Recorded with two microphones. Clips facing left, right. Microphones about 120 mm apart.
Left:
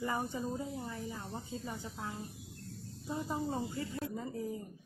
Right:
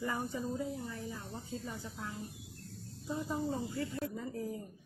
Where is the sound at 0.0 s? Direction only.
20° left (ahead or behind).